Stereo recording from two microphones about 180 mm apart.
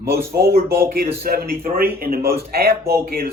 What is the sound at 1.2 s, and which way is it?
A man's voice, 60° right (ahead or behind).